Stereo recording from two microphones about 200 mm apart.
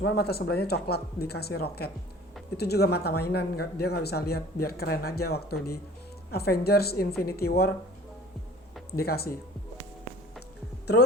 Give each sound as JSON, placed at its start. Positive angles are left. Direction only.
{"t": 0.0, "sound": "speech", "side_deg": 55}
{"t": 9.0, "sound": "speech", "side_deg": 50}